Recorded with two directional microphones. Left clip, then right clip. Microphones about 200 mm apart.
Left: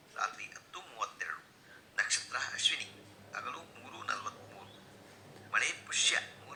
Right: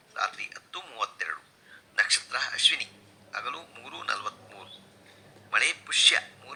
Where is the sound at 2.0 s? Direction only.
35° right (ahead or behind).